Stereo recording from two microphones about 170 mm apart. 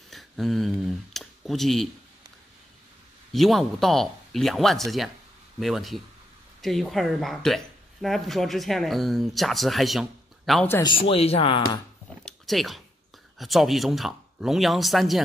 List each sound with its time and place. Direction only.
0.1 s speech: centre (ahead or behind)
3.3 s speech: centre (ahead or behind)
10.8 s speech: 30° left (ahead or behind)
12.3 s speech: centre (ahead or behind)